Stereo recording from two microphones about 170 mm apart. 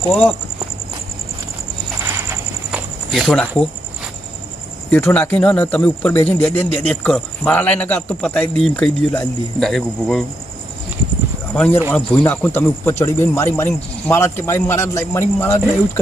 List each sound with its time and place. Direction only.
0.1 s speech: 10° left (ahead or behind)
2.1 s a sound: 15° right (ahead or behind)
3.1 s speech: centre (ahead or behind)
4.9 s speech: 10° left (ahead or behind)
11.5 s speech: 10° left (ahead or behind)